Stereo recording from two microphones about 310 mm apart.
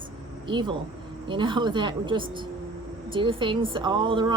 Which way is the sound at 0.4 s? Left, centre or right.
Centre.